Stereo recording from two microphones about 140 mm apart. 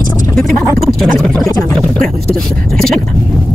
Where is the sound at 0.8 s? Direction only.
Centre (ahead or behind).